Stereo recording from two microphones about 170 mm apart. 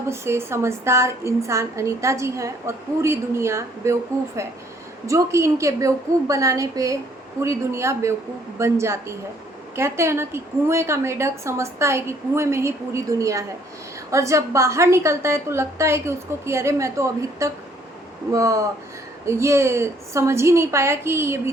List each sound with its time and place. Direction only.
0.1 s a woman's voice: 15° right (ahead or behind)
5.0 s a woman's voice: 15° right (ahead or behind)